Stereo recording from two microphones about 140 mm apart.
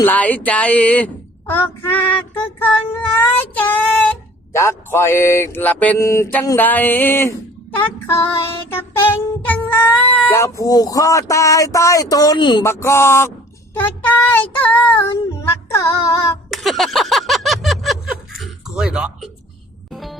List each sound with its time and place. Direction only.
0.0 s a woman's voice: 10° left (ahead or behind)
9.4 s speech: 15° left (ahead or behind); by 12.6 s 35° left (ahead or behind)
12.6 s a woman's voice: 20° left (ahead or behind)
16.5 s a sound: centre (ahead or behind)
19.9 s music: centre (ahead or behind)